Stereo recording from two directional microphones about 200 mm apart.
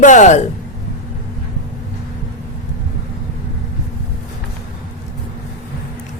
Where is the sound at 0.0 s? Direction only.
40° left (ahead or behind).